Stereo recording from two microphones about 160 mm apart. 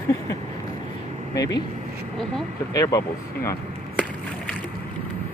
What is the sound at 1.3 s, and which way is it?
Speech, 20° left (ahead or behind).